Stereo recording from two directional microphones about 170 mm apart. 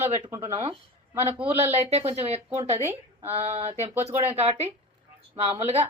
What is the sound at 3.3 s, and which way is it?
Speech, 35° right (ahead or behind).